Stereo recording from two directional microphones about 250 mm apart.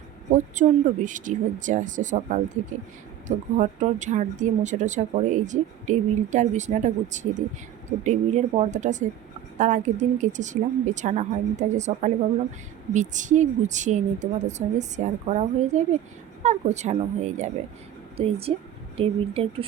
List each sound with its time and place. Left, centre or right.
0.5 s speech: right